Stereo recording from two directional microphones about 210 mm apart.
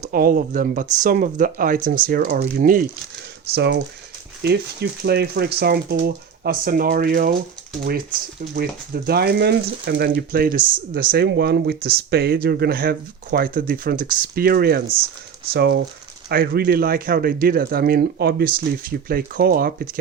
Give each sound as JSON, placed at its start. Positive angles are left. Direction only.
{"t": 0.1, "sound": "speech", "side_deg": -45}
{"t": 3.5, "sound": "speech", "side_deg": -50}
{"t": 8.5, "sound": "speech", "side_deg": -45}